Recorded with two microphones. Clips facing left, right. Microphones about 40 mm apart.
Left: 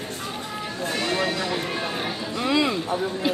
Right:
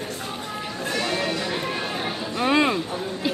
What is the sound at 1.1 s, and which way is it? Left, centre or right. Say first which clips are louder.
Music: left 1 dB; centre.